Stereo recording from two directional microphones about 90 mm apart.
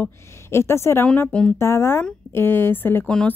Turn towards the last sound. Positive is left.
turn(degrees=25)  # may be behind; listen again after turning